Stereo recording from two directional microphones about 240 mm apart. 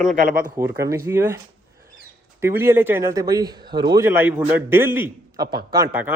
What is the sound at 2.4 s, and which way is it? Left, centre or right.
Speech, centre.